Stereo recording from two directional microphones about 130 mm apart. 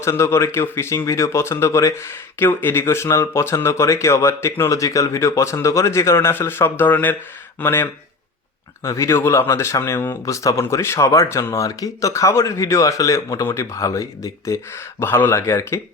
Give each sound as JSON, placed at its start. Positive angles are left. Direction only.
{"t": 0.0, "sound": "speech", "side_deg": 20}